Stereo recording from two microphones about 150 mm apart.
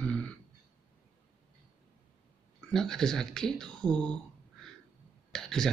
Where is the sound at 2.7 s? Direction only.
5° left (ahead or behind).